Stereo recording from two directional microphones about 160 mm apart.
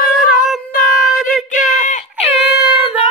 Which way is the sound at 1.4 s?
50° left (ahead or behind).